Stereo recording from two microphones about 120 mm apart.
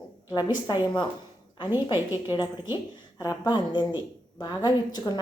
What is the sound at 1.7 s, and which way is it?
A woman's voice, 20° right (ahead or behind).